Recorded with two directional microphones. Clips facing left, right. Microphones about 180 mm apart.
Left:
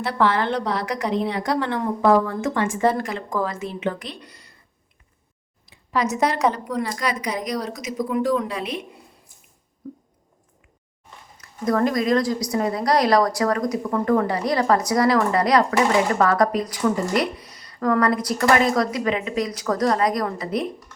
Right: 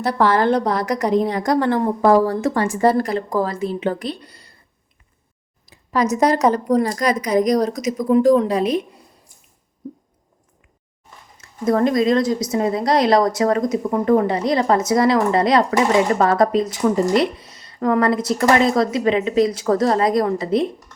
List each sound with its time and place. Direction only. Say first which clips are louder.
0.0 s a woman's voice: right 4 dB; 40° right (ahead or behind)
5.6 s a woman's voice: right 4 dB; 40° right (ahead or behind)
11.3 s speech: right 3 dB; 25° right (ahead or behind)